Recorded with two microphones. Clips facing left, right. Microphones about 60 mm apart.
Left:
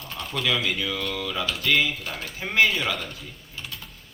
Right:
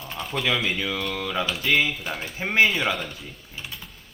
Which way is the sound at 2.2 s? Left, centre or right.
Right.